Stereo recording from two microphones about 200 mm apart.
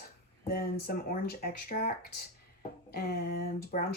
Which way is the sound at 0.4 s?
50° left (ahead or behind).